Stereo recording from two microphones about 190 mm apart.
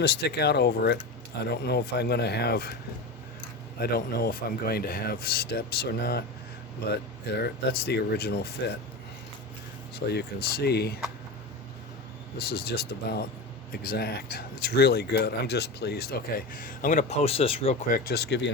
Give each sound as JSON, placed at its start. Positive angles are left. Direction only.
{"t": 0.0, "sound": "speech", "side_deg": 60}
{"t": 3.8, "sound": "speech", "side_deg": 55}
{"t": 9.9, "sound": "speech", "side_deg": 60}
{"t": 12.4, "sound": "speech", "side_deg": 55}
{"t": 17.8, "sound": "speech", "side_deg": 50}